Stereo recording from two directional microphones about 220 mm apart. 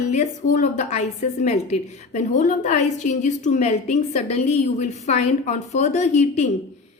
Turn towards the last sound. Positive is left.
turn(degrees=30)  # may be behind; listen again after turning